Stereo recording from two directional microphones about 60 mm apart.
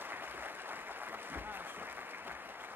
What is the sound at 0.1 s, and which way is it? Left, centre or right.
Applause, right.